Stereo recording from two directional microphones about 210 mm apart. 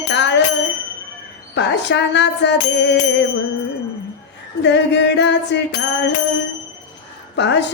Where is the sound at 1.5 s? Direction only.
55° left (ahead or behind).